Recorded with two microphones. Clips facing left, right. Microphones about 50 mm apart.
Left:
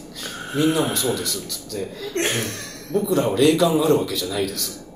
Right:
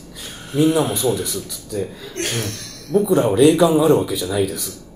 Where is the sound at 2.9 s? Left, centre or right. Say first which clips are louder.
Right 4 dB; centre.